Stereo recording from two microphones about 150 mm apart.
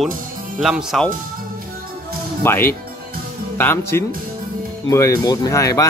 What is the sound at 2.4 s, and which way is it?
Speech, 15° left (ahead or behind).